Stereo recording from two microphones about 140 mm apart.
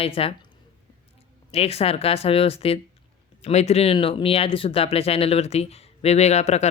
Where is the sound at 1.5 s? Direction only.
45° left (ahead or behind).